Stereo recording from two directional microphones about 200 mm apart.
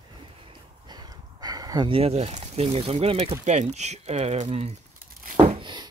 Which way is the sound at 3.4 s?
35° right (ahead or behind).